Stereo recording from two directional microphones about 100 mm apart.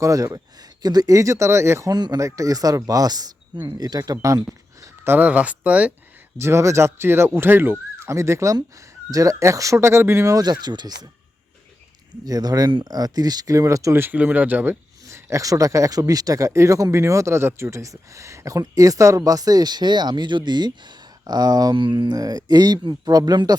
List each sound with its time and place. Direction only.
0.0 s speech: 35° right (ahead or behind)
1.9 s speech: 40° right (ahead or behind)
5.0 s speech: 15° right (ahead or behind)
6.4 s speech: 30° right (ahead or behind)
10.3 s speech: 45° right (ahead or behind)
12.2 s speech: 40° right (ahead or behind); by 14.8 s 20° right (ahead or behind)
15.0 s speech: 30° right (ahead or behind)